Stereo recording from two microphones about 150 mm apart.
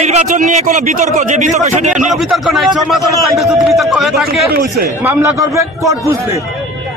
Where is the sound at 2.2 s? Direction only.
Centre (ahead or behind).